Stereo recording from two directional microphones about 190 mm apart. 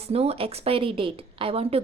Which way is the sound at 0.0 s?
30° right (ahead or behind).